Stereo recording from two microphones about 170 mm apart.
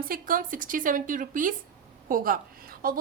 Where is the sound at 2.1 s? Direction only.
55° right (ahead or behind).